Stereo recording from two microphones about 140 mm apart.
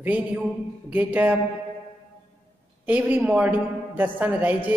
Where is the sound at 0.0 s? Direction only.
10° right (ahead or behind).